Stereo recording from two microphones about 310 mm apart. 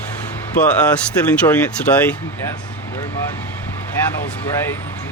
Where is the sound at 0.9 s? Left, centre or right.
Centre.